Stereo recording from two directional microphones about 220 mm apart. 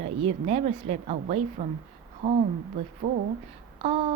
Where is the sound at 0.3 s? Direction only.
30° right (ahead or behind).